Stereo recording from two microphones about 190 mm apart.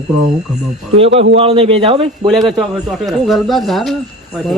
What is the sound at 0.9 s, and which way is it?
A man's voice, 30° right (ahead or behind).